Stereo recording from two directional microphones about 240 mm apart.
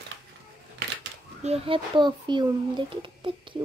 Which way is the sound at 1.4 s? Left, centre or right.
Right.